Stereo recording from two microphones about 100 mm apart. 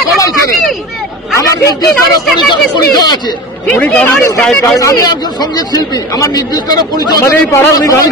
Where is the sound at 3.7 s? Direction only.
15° left (ahead or behind).